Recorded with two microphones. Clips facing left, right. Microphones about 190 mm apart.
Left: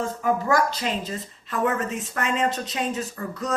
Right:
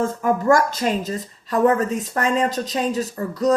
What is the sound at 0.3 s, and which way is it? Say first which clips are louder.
A woman's voice: right 4 dB; 45° right (ahead or behind).